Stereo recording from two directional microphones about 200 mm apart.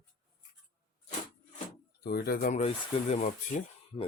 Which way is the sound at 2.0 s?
50° left (ahead or behind).